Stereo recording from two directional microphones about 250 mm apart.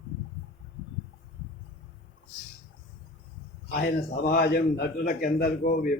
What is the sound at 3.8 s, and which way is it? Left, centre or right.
A man's voice, left.